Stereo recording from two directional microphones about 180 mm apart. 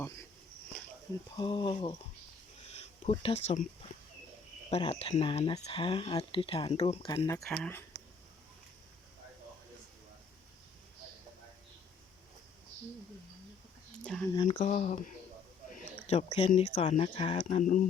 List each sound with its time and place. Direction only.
1.4 s speech: 30° left (ahead or behind)
4.7 s speech: 35° left (ahead or behind)
7.4 s speech: 5° left (ahead or behind)
14.0 s speech: 5° left (ahead or behind)
14.4 s speech: 40° left (ahead or behind)
17.6 s speech: 45° left (ahead or behind)